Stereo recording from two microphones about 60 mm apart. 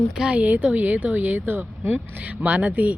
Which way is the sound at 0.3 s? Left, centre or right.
Right.